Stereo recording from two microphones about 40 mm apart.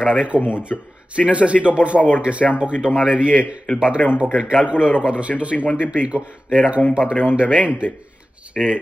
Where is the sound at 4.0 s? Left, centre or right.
Left.